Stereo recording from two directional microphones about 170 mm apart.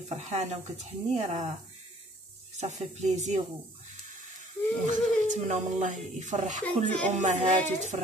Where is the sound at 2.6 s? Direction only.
40° right (ahead or behind).